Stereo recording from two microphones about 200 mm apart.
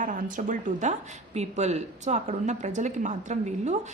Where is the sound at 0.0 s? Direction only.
40° right (ahead or behind).